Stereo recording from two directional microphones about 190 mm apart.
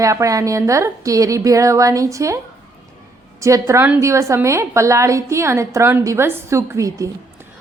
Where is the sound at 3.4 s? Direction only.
15° right (ahead or behind).